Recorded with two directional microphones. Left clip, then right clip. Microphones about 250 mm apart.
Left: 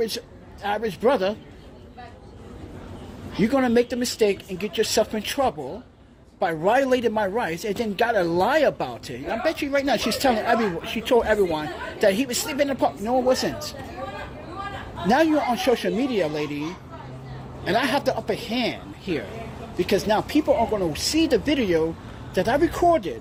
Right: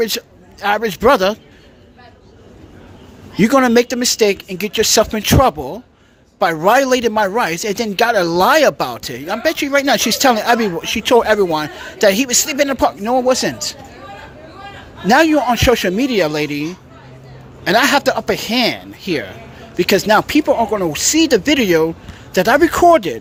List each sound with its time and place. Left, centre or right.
0.0 s speech: right
3.4 s a man's voice: right
15.0 s speech: right